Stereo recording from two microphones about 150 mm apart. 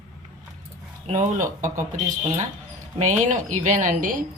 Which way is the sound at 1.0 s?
55° right (ahead or behind).